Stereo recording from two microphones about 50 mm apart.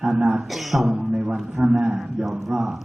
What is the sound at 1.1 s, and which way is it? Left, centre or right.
Speech, centre.